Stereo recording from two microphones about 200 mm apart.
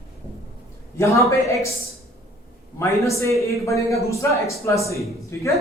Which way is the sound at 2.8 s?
15° left (ahead or behind).